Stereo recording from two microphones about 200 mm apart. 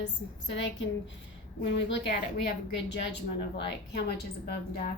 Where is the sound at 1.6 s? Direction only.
60° left (ahead or behind).